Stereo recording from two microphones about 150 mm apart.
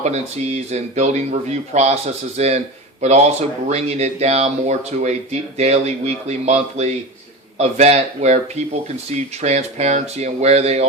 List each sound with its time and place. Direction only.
0.0 s speech: 45° right (ahead or behind)